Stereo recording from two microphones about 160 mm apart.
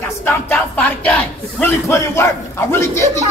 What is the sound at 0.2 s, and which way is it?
A man's voice, 10° left (ahead or behind).